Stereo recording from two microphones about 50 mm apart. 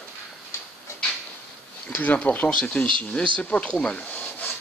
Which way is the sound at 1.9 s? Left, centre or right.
Left.